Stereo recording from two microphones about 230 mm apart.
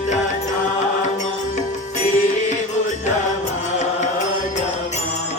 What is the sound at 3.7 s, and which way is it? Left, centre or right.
Music, left.